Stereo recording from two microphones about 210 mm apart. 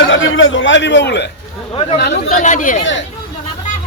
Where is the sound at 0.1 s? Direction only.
65° left (ahead or behind).